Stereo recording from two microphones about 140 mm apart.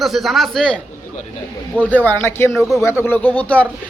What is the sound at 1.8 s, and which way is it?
A man's voice, 10° left (ahead or behind).